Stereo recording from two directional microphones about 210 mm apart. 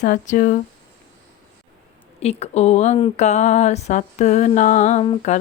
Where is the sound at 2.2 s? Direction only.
30° left (ahead or behind).